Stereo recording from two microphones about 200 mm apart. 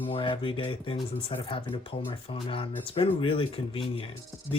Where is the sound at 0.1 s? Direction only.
25° left (ahead or behind).